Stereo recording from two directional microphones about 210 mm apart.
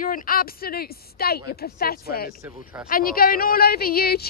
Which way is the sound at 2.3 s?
5° right (ahead or behind).